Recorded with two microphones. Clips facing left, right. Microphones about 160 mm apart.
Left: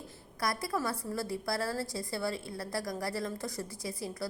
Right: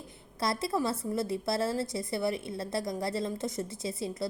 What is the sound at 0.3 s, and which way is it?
A woman's voice, 25° right (ahead or behind).